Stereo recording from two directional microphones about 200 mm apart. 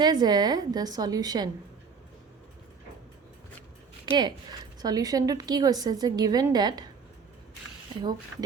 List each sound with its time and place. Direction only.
0.0 s a woman's voice: 20° right (ahead or behind)
4.0 s a woman's voice: 20° right (ahead or behind)